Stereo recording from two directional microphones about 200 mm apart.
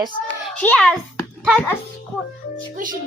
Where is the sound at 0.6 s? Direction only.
5° left (ahead or behind).